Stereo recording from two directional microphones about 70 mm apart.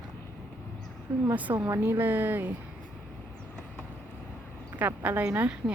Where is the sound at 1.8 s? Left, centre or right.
Right.